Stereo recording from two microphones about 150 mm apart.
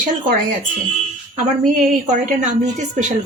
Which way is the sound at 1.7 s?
55° right (ahead or behind).